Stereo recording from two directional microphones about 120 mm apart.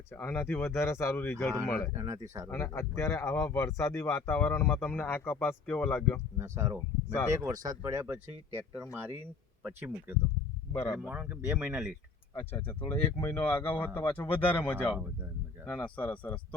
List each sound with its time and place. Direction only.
0.1 s speech: 15° left (ahead or behind)
1.9 s speech: 25° right (ahead or behind)
2.5 s speech: 20° left (ahead or behind)
6.3 s speech: 25° right (ahead or behind)
10.7 s speech: 20° left (ahead or behind)
10.9 s speech: 15° right (ahead or behind)
12.3 s speech: 15° left (ahead or behind)